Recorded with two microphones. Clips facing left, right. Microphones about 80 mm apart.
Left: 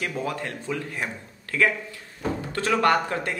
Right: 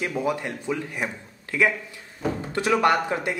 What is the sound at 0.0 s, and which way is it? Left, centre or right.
A man's voice, centre.